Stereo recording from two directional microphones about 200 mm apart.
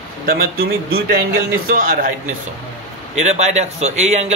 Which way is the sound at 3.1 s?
35° right (ahead or behind).